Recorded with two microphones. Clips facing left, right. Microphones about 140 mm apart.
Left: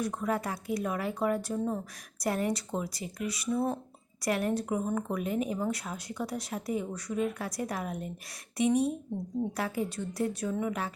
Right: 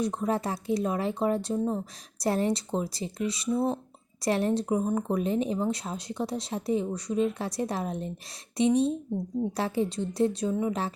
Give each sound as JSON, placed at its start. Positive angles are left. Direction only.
{"t": 0.0, "sound": "speech", "side_deg": -25}